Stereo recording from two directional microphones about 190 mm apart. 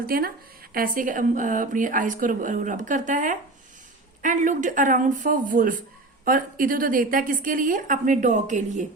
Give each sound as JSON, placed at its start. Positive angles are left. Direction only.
{"t": 0.1, "sound": "speech", "side_deg": -50}